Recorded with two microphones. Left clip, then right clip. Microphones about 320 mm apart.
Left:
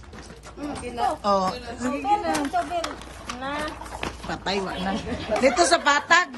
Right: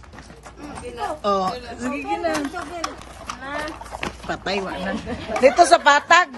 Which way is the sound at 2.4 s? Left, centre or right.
Centre.